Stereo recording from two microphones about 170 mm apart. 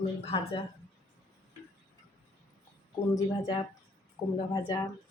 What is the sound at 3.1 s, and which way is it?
Speech, 25° left (ahead or behind).